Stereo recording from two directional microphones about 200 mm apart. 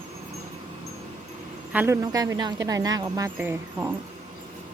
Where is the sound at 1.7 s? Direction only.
10° right (ahead or behind).